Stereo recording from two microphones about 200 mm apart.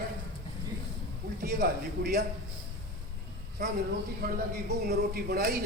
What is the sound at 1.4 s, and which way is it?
Speech, 50° right (ahead or behind).